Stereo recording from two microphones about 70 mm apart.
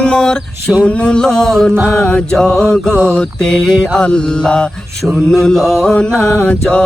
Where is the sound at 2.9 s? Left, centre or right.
Right.